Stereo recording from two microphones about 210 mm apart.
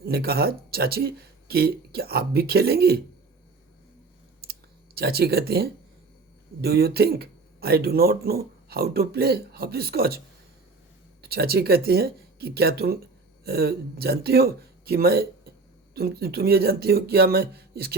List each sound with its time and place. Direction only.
0.0 s speech: 50° right (ahead or behind)
4.9 s speech: 50° right (ahead or behind)
11.2 s speech: 50° right (ahead or behind)